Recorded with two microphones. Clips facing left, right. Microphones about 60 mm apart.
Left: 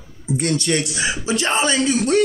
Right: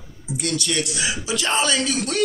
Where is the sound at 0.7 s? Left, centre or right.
Left.